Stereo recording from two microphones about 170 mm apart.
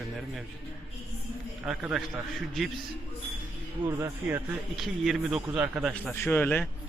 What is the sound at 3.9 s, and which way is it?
Speech, 15° right (ahead or behind).